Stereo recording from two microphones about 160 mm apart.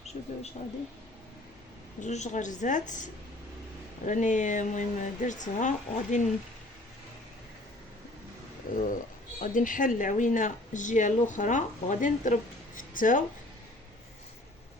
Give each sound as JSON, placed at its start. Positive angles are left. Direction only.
{"t": 2.0, "sound": "speech", "side_deg": 45}
{"t": 8.7, "sound": "speech", "side_deg": 60}